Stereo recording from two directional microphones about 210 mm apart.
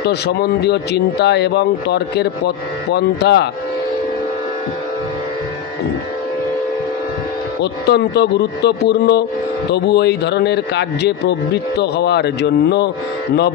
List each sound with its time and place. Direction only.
0.0 s speech: 50° left (ahead or behind)
7.6 s speech: 50° left (ahead or behind)